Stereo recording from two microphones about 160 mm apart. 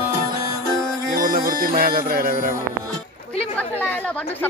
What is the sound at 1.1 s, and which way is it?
Music, 60° right (ahead or behind).